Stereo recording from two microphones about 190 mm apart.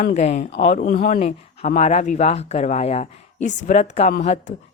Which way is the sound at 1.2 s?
35° left (ahead or behind).